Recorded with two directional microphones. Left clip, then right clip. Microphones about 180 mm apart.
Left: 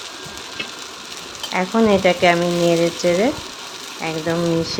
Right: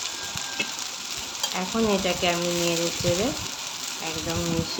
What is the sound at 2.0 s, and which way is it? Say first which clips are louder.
Speech: left 10 dB; 50° left (ahead or behind).